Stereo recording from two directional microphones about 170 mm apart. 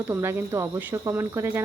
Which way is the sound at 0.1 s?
15° right (ahead or behind).